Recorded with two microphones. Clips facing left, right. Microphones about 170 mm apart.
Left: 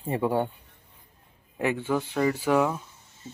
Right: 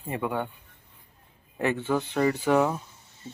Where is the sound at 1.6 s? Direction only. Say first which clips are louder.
Even; 10° left (ahead or behind); by 2.8 s 5° right (ahead or behind).